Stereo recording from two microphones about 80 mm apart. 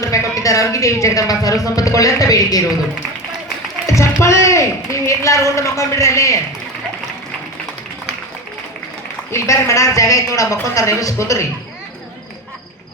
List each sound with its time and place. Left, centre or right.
0.0 s speech: left
3.8 s a man's voice: left
9.3 s speech: left